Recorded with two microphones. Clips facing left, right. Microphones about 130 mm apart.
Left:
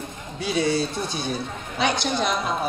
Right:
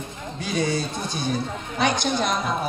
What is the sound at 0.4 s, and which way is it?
A man's voice, 45° right (ahead or behind).